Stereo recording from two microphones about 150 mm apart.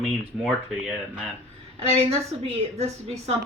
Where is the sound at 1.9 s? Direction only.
40° right (ahead or behind).